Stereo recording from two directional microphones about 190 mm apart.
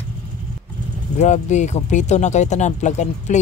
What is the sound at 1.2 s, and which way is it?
Speech, 40° left (ahead or behind).